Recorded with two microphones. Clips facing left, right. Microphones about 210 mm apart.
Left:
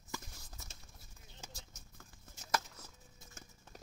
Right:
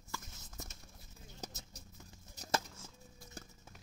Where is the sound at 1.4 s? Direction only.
40° right (ahead or behind).